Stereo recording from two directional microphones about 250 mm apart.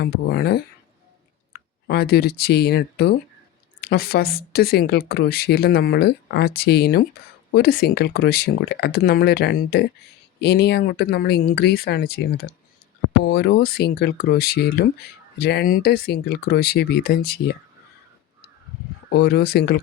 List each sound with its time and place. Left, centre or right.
0.0 s speech: left
19.1 s speech: left